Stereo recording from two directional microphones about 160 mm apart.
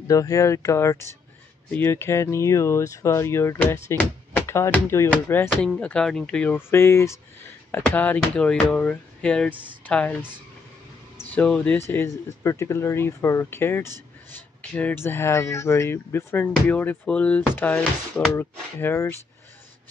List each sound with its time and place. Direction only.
0.1 s speech: 20° left (ahead or behind)
11.1 s speech: 10° left (ahead or behind)